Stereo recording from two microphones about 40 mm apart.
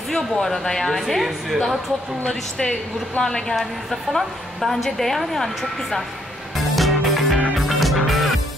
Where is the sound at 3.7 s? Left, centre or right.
Centre.